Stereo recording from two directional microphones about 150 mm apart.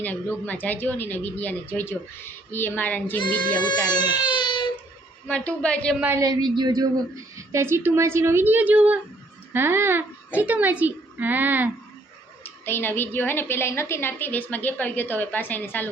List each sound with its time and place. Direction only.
0.0 s a woman's voice: 10° left (ahead or behind)
3.8 s baby cry: 30° left (ahead or behind)
5.3 s a woman's voice: 10° left (ahead or behind)
6.0 s a child's voice: 15° right (ahead or behind)
6.2 s a child's voice: 30° right (ahead or behind); by 11.7 s 15° right (ahead or behind)
12.4 s a woman's voice: 15° left (ahead or behind)